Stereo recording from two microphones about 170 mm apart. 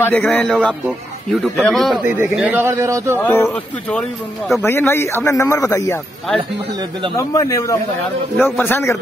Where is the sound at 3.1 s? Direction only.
15° left (ahead or behind).